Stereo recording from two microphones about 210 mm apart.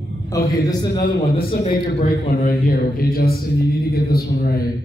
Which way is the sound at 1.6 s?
40° left (ahead or behind).